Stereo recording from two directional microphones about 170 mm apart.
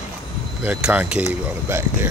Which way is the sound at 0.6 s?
10° right (ahead or behind).